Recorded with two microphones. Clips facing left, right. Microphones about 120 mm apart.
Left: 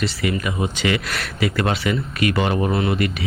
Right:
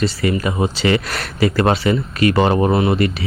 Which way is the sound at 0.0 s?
35° right (ahead or behind).